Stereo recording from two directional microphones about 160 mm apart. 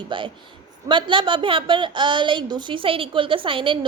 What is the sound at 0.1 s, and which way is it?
A woman's voice, 30° right (ahead or behind).